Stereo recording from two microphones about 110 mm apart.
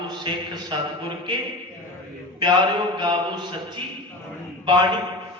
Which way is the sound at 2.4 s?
40° right (ahead or behind).